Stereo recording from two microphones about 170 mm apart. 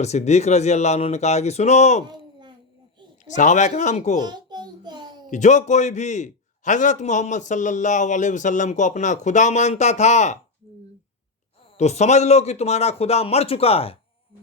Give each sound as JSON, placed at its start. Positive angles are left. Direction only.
{"t": 0.0, "sound": "a man's voice", "side_deg": 40}
{"t": 3.2, "sound": "a man's voice", "side_deg": 45}
{"t": 4.2, "sound": "a sound", "side_deg": -25}
{"t": 5.3, "sound": "a man's voice", "side_deg": 45}
{"t": 11.8, "sound": "a man's voice", "side_deg": 40}